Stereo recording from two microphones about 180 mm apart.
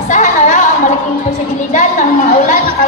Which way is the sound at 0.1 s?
45° left (ahead or behind).